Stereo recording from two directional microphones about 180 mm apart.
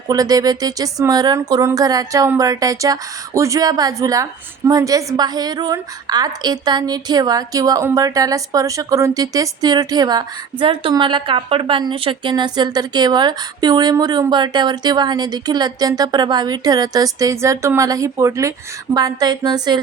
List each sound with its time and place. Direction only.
0.1 s speech: 20° right (ahead or behind)